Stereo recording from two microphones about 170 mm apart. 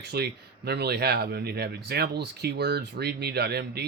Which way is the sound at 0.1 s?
70° right (ahead or behind).